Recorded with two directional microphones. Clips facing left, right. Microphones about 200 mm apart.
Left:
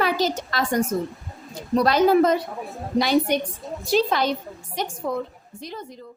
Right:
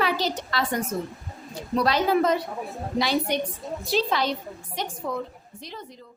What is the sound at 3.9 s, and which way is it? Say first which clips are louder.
A woman's voice: left 4 dB; 50° left (ahead or behind).